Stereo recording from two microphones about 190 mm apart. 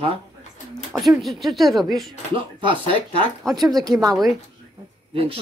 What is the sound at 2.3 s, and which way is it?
Speech, 30° right (ahead or behind).